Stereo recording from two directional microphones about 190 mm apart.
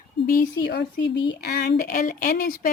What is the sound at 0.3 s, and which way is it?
A woman's voice, 55° left (ahead or behind).